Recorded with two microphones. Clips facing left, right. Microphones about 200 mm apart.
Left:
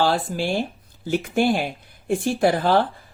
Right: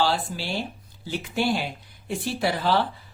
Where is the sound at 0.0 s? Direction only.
50° left (ahead or behind).